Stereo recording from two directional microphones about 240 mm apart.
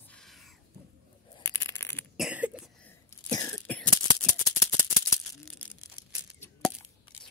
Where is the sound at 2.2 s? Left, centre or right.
Centre.